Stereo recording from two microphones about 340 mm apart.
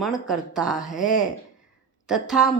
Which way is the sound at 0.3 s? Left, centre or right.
Centre.